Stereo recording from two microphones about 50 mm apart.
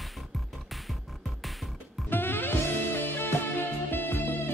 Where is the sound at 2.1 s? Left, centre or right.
Left.